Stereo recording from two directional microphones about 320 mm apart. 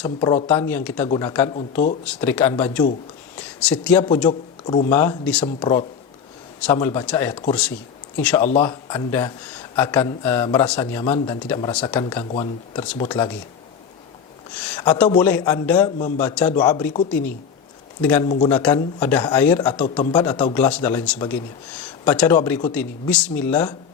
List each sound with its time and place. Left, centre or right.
0.0 s a man's voice: centre
1.5 s speech: left
2.2 s a man's voice: centre
4.3 s a man's voice: centre
14.7 s speech: centre
16.0 s speech: left
16.2 s a man's voice: centre
18.0 s a man's voice: centre